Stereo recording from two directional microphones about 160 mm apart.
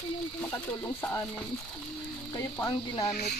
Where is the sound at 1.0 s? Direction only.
15° left (ahead or behind).